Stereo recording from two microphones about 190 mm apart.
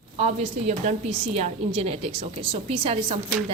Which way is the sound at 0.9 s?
35° right (ahead or behind).